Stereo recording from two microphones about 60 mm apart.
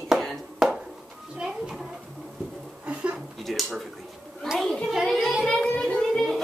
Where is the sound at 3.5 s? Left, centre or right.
Centre.